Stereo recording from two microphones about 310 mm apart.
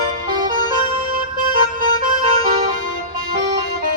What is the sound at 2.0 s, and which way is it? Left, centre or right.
Music, right.